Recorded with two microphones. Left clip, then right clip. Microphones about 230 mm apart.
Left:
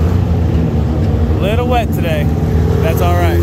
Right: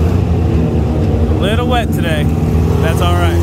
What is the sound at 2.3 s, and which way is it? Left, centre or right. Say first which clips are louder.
Vehicle: even; right.